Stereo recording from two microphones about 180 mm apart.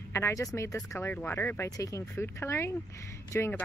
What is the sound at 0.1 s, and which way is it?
Speech, 15° left (ahead or behind).